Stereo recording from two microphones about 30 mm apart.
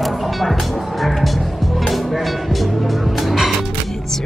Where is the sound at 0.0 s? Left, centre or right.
Centre.